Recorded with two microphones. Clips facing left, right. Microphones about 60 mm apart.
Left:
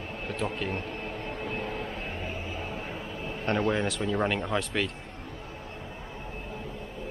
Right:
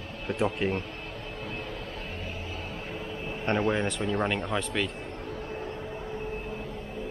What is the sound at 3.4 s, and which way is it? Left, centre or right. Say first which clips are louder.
Speech: even; centre.